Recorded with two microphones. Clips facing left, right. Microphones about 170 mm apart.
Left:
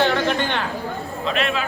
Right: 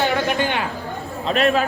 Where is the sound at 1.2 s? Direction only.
40° right (ahead or behind).